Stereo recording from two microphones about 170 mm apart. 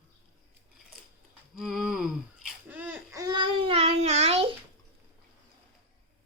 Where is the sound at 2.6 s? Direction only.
10° right (ahead or behind); by 4.5 s 35° right (ahead or behind).